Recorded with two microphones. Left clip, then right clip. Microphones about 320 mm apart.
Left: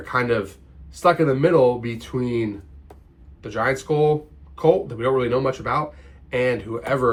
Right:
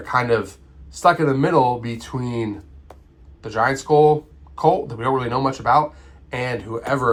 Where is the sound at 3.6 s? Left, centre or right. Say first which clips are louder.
Right 5 dB; centre.